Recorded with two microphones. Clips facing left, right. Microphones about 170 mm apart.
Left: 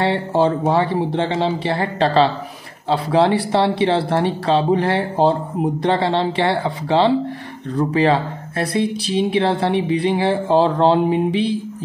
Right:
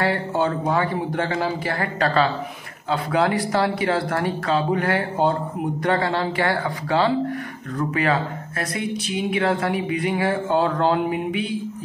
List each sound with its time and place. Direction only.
0.0 s speech: 30° left (ahead or behind)